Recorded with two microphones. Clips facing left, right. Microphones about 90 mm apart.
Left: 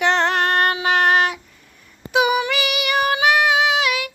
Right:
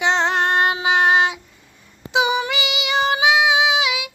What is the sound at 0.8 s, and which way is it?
Child singing, 15° right (ahead or behind).